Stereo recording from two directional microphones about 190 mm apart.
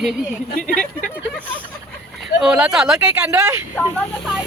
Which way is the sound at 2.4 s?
5° right (ahead or behind).